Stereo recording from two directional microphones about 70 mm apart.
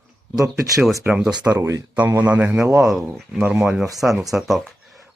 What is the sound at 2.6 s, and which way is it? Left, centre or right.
Speech, right.